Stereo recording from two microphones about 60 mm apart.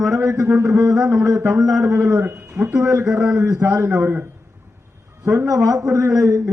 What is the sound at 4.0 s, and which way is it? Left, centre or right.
Speech, right.